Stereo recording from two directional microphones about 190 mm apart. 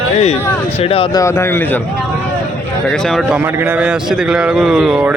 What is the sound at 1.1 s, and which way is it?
Speech, 15° left (ahead or behind).